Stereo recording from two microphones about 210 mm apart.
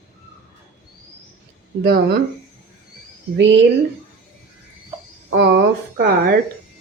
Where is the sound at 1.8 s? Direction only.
50° right (ahead or behind).